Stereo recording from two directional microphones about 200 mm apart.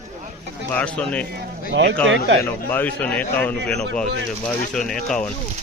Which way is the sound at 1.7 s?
65° right (ahead or behind).